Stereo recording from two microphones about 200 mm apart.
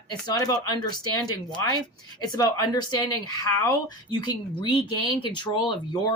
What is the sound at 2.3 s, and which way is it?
Speech, 20° left (ahead or behind).